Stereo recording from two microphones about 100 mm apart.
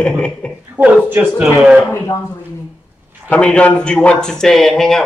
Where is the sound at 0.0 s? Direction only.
10° left (ahead or behind).